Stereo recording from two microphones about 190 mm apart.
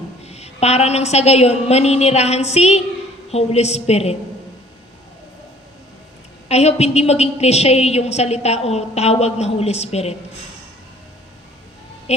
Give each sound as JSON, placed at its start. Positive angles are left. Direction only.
{"t": 0.3, "sound": "a woman's voice", "side_deg": 35}
{"t": 6.5, "sound": "a woman's voice", "side_deg": 35}